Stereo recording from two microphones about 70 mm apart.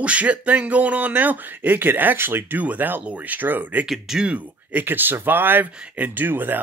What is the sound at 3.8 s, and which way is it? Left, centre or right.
Speech, centre.